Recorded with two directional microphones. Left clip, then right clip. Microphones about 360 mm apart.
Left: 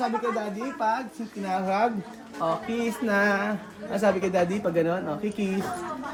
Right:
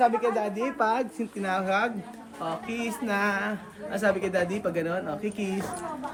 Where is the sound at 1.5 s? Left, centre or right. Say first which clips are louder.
Left 2 dB; centre.